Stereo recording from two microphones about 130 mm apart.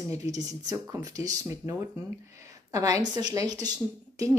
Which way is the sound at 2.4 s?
25° right (ahead or behind).